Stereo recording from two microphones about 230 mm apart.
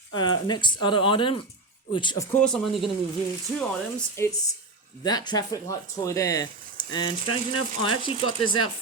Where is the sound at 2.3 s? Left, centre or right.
Centre.